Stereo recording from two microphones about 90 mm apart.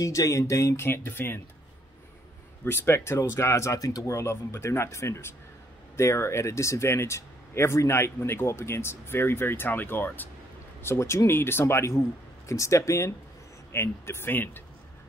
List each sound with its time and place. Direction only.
0.0 s speech: 35° left (ahead or behind)
2.6 s speech: 25° left (ahead or behind)